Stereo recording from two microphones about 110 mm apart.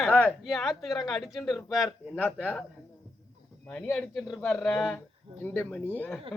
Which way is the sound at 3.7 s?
5° left (ahead or behind).